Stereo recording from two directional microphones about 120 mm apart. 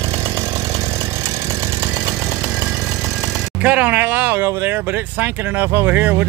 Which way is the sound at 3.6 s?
15° right (ahead or behind).